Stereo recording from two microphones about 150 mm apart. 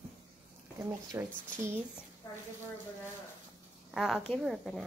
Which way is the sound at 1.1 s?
20° right (ahead or behind).